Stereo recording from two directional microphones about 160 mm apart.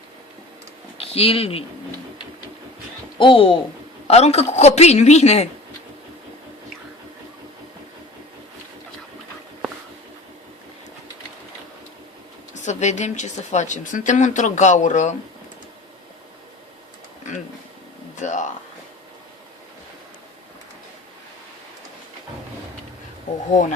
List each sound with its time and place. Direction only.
0.9 s speech: 35° left (ahead or behind)
3.2 s a woman's voice: 35° left (ahead or behind)
12.6 s speech: 45° left (ahead or behind)
18.2 s a sound: 50° left (ahead or behind)